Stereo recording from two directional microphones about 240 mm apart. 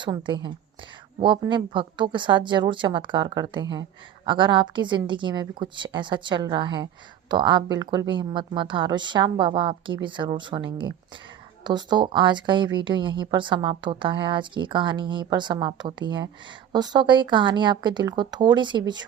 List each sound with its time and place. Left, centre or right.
0.0 s speech: centre